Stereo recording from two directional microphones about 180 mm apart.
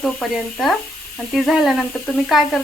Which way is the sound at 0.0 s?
Centre (ahead or behind).